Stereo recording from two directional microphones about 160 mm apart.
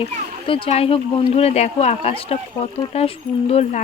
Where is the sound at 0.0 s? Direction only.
35° left (ahead or behind).